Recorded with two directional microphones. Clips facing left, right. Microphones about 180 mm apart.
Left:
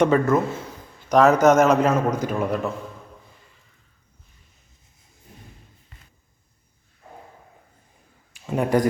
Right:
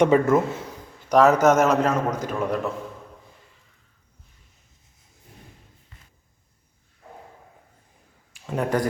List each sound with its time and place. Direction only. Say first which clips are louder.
0.0 s speech: right 1 dB; 20° right (ahead or behind)
1.1 s a man's voice: left 1 dB; 5° right (ahead or behind)
8.3 s a sound: left 3 dB; 10° left (ahead or behind)